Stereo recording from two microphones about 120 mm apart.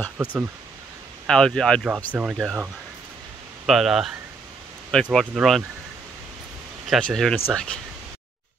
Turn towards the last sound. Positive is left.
turn(degrees=10)  # may be behind; listen again after turning